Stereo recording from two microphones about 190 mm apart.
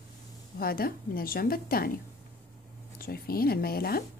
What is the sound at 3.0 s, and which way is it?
Speech, 50° left (ahead or behind).